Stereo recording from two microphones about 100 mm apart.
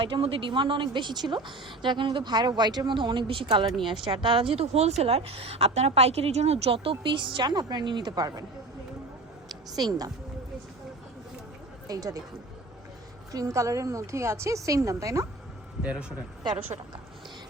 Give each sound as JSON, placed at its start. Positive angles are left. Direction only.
{"t": 0.0, "sound": "a woman's voice", "side_deg": -65}
{"t": 9.5, "sound": "a woman's voice", "side_deg": -40}
{"t": 11.9, "sound": "a woman's voice", "side_deg": -40}
{"t": 13.3, "sound": "a woman's voice", "side_deg": -35}
{"t": 15.8, "sound": "a man's voice", "side_deg": -10}
{"t": 16.4, "sound": "a woman's voice", "side_deg": -50}